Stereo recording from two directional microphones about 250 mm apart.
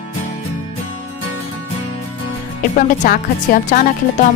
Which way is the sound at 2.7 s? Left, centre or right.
Left.